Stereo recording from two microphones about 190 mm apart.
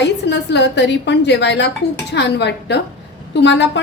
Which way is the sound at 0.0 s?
65° left (ahead or behind).